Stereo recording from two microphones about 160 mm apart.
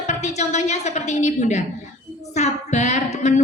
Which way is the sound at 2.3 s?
45° left (ahead or behind).